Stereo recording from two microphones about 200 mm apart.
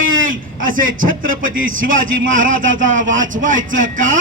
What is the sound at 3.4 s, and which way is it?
Speech, 40° right (ahead or behind).